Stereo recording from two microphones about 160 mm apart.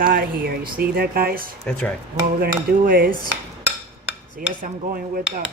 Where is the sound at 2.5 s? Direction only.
60° right (ahead or behind).